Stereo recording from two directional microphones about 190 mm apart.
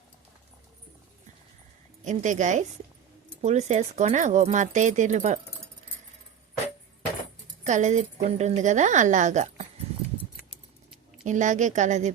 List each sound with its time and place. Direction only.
2.0 s a woman's voice: 40° right (ahead or behind)
7.6 s a woman's voice: 40° right (ahead or behind)
11.3 s a woman's voice: 40° right (ahead or behind)